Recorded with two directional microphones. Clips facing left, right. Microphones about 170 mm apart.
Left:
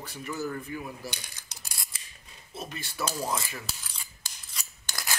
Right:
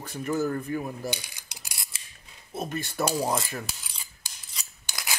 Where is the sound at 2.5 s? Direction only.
50° right (ahead or behind).